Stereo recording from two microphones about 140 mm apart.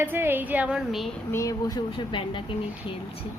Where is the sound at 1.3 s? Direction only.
25° left (ahead or behind).